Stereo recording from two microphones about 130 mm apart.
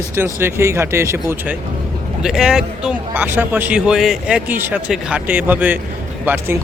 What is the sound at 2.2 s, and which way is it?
Speech, 5° right (ahead or behind).